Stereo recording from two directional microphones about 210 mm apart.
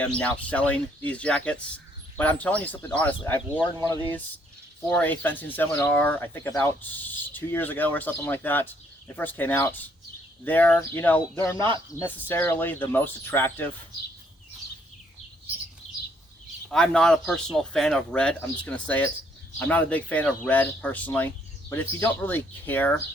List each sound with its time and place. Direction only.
0.0 s speech: 5° left (ahead or behind)
4.9 s speech: 10° left (ahead or behind)
11.9 s speech: 15° right (ahead or behind)
12.3 s speech: 10° left (ahead or behind)
15.9 s a sound: 30° left (ahead or behind)
16.6 s speech: 5° left (ahead or behind)